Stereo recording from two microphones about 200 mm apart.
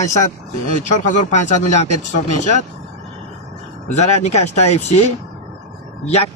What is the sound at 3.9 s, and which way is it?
Speech, 35° left (ahead or behind).